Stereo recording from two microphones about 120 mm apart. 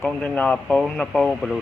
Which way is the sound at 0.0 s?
10° left (ahead or behind).